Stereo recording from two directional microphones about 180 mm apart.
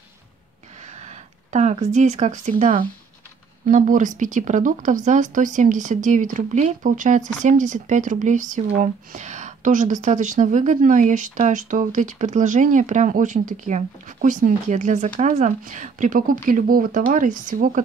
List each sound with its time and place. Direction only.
0.9 s speech: 40° right (ahead or behind)